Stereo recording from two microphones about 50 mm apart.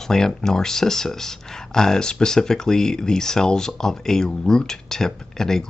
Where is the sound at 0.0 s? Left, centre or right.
Centre.